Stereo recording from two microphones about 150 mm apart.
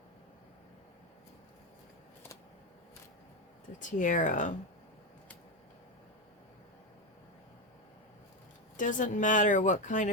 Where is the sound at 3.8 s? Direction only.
60° left (ahead or behind).